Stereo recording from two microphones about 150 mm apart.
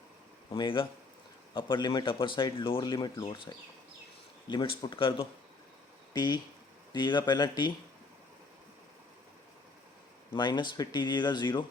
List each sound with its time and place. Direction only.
0.5 s speech: 35° left (ahead or behind)
10.3 s speech: 30° left (ahead or behind)